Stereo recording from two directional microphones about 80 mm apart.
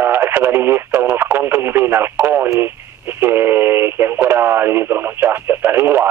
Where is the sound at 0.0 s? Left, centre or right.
Right.